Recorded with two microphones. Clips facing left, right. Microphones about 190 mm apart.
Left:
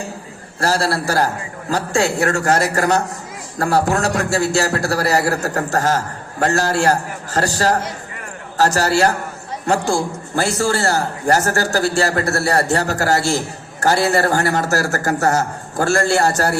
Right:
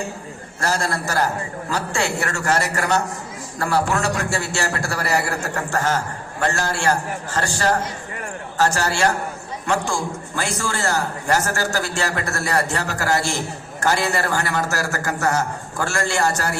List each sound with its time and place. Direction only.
0.6 s a man's voice: 35° left (ahead or behind)